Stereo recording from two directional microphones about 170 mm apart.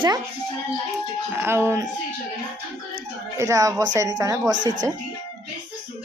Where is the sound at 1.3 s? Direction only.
15° right (ahead or behind).